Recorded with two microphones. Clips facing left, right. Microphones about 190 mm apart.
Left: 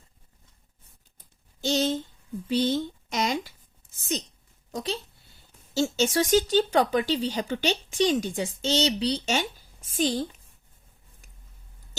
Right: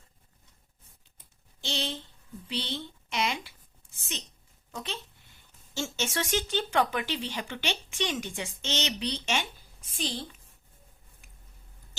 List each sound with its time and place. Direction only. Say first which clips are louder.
1.6 s speech: left 10 dB; 45° left (ahead or behind)
4.7 s a sound: left 7 dB; 35° left (ahead or behind)
5.7 s speech: left 9 dB; 35° left (ahead or behind)